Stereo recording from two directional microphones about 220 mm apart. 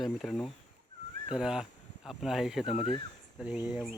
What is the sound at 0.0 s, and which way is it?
Speech, centre (ahead or behind).